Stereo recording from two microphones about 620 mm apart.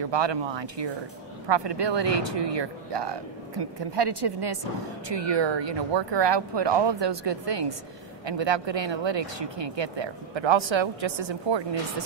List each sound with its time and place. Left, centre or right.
0.1 s speech: right